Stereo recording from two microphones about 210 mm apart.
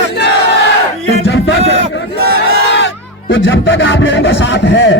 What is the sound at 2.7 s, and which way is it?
A man's voice, 55° left (ahead or behind).